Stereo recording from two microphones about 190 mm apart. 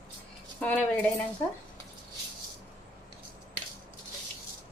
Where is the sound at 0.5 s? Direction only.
5° left (ahead or behind).